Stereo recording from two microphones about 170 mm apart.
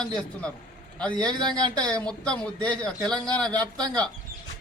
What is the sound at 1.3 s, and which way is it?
Speech, 25° right (ahead or behind).